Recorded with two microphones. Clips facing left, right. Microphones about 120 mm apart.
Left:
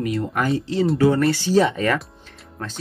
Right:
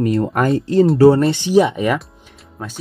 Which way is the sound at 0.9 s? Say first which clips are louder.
Right 6 dB; 30° right (ahead or behind).